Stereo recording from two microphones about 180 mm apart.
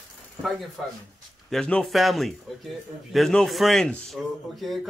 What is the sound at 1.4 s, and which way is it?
Speech, 5° left (ahead or behind).